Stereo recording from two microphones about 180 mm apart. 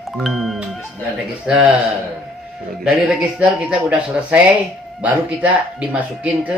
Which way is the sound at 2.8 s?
5° right (ahead or behind).